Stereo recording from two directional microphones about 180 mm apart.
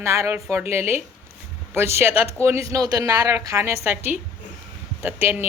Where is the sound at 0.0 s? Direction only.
15° right (ahead or behind).